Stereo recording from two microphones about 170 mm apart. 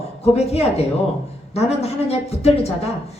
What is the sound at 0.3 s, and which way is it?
A woman's voice, 40° left (ahead or behind).